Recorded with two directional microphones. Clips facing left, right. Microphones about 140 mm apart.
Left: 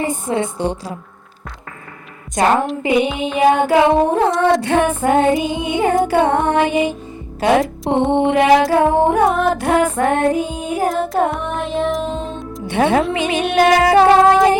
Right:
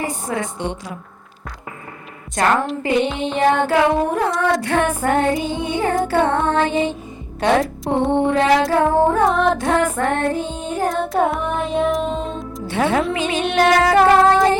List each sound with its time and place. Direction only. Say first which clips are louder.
0.0 s speech: left 4 dB; 25° left (ahead or behind)
2.3 s speech: left 3 dB; 20° left (ahead or behind)
2.8 s music: left 2 dB; 15° left (ahead or behind)
4.6 s speech: left 3 dB; 20° left (ahead or behind)
4.9 s music: left 4 dB; 15° left (ahead or behind)
7.9 s speech: left 2 dB; 20° left (ahead or behind)
8.7 s music: left 2 dB; 15° left (ahead or behind)
9.2 s music: left 1 dB; 5° left (ahead or behind)
12.6 s speech: left 4 dB; 20° left (ahead or behind)
13.1 s music: left 2 dB; 15° left (ahead or behind)
13.4 s music: left 2 dB; 5° left (ahead or behind)